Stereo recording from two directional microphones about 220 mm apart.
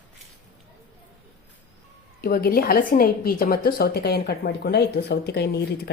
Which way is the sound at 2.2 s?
40° left (ahead or behind).